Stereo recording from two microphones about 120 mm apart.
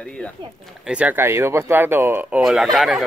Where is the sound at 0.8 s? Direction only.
10° right (ahead or behind).